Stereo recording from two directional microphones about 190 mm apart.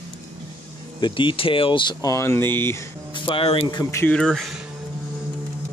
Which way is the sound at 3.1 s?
25° left (ahead or behind).